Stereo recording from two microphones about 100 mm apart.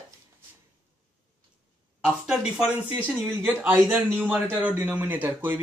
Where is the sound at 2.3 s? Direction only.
5° right (ahead or behind).